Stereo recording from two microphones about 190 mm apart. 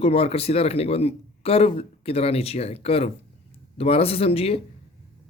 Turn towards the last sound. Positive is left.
turn(degrees=30)  # may be behind; listen again after turning